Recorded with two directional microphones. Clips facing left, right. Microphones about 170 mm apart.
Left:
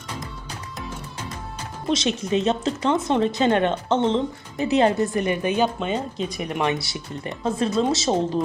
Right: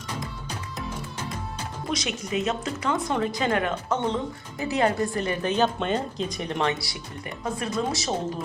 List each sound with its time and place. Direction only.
1.9 s speech: 30° left (ahead or behind); by 6.7 s 10° left (ahead or behind)
6.7 s speech: 25° left (ahead or behind)